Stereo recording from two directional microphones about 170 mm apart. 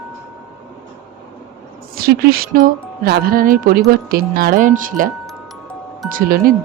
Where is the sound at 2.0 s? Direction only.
60° right (ahead or behind).